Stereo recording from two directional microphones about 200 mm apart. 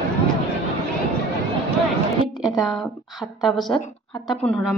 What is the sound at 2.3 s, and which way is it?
Speech, centre (ahead or behind).